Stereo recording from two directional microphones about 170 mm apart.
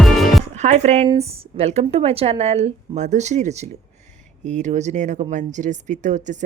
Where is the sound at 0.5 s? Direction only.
40° right (ahead or behind).